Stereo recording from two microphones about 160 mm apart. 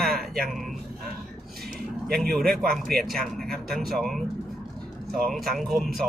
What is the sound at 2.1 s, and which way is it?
Speech, 75° right (ahead or behind).